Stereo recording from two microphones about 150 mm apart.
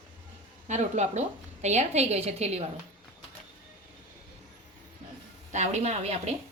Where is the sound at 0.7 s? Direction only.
50° right (ahead or behind).